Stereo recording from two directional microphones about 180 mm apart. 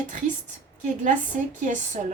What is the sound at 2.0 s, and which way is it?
Speech, 45° right (ahead or behind).